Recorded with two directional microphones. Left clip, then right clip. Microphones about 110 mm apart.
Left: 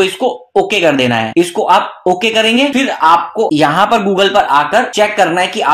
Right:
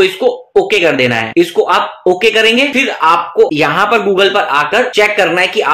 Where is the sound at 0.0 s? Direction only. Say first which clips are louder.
Right 2 dB; 45° left (ahead or behind).